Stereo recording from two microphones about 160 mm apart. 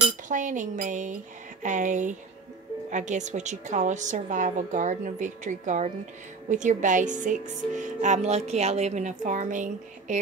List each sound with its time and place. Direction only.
0.0 s speech: 55° right (ahead or behind)